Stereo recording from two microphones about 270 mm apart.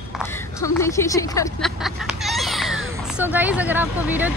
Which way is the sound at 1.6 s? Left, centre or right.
Centre.